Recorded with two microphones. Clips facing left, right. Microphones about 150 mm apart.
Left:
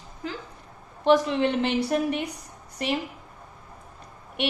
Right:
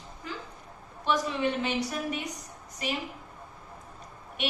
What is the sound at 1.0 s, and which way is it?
Speech, 60° left (ahead or behind).